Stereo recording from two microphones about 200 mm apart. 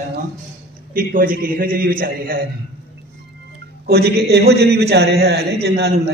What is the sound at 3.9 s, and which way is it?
A man's voice, 55° right (ahead or behind).